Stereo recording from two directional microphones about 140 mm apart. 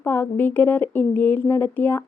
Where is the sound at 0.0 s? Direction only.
15° left (ahead or behind).